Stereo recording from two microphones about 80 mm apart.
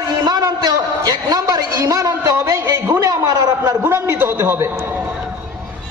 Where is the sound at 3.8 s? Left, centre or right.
Right.